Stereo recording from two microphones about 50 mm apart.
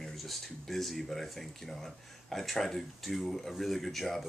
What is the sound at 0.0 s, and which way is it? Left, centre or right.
Speech, centre.